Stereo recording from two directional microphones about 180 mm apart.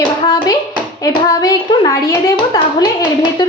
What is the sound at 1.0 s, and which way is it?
Speech, 20° left (ahead or behind).